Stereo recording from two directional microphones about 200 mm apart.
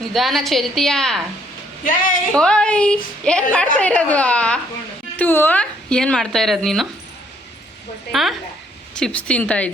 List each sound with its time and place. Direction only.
0.1 s speech: centre (ahead or behind)
1.8 s a man's voice: 45° left (ahead or behind)
2.3 s speech: 5° left (ahead or behind)
8.1 s speech: centre (ahead or behind)